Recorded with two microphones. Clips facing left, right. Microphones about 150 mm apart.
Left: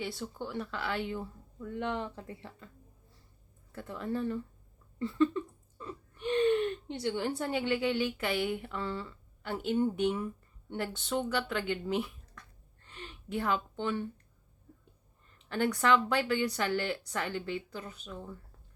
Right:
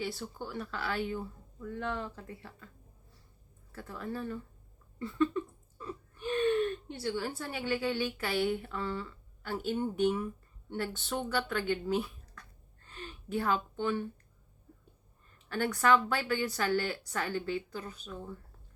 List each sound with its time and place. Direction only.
0.4 s speech: 20° left (ahead or behind)
3.7 s speech: 20° left (ahead or behind)
12.9 s a sound: 20° left (ahead or behind)
15.4 s speech: 20° left (ahead or behind)